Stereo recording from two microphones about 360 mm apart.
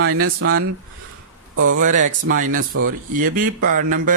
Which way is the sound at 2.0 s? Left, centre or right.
Right.